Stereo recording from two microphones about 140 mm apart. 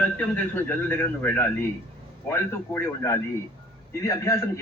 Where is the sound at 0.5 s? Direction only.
15° left (ahead or behind).